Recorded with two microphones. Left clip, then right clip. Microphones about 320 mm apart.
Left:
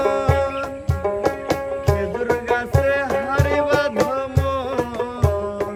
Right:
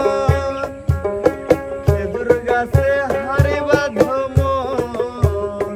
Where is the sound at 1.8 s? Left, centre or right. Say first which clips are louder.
Right 5 dB; left.